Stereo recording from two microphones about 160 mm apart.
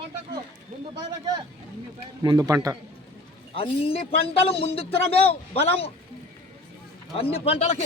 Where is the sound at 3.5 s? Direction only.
35° left (ahead or behind).